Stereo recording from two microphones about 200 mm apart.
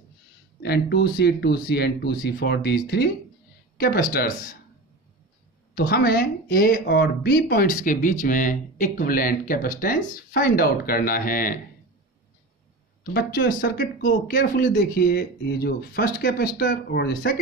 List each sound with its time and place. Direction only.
0.6 s speech: 55° left (ahead or behind)
5.8 s speech: 50° left (ahead or behind)
13.0 s speech: 50° left (ahead or behind)